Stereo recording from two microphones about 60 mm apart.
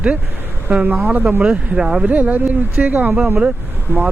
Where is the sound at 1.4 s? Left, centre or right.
Centre.